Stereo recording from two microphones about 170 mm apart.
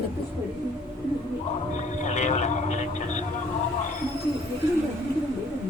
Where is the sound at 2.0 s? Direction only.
45° left (ahead or behind).